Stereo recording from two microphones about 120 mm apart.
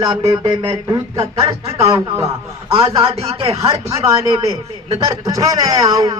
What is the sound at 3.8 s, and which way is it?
A man's voice, 25° right (ahead or behind).